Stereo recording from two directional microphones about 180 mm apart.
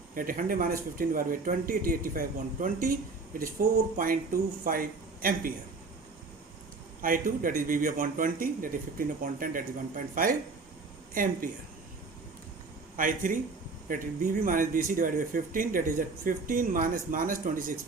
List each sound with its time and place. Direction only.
0.1 s speech: 50° right (ahead or behind)
7.0 s speech: 50° right (ahead or behind)
11.1 s speech: 50° right (ahead or behind)
13.0 s speech: 50° right (ahead or behind)